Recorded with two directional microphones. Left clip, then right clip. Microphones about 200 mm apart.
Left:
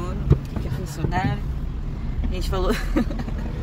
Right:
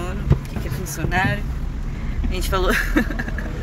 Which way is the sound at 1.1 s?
5° right (ahead or behind).